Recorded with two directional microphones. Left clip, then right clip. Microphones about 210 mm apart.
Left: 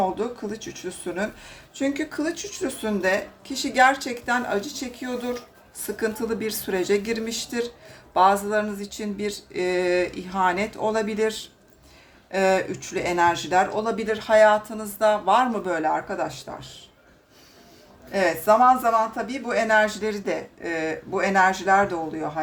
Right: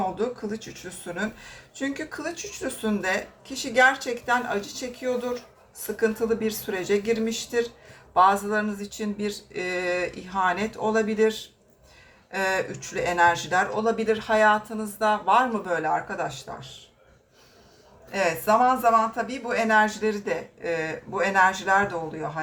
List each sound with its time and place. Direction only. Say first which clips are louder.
0.2 s a woman's voice: even; 20° left (ahead or behind)
18.1 s speech: left 3 dB; 25° left (ahead or behind)